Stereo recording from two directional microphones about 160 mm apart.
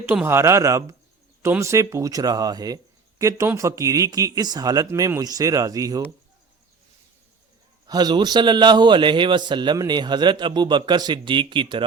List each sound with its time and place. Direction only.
0.0 s a man's voice: 10° right (ahead or behind)
7.9 s speech: 25° right (ahead or behind)